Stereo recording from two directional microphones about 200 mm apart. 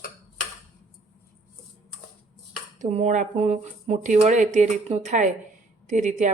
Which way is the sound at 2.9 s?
35° right (ahead or behind).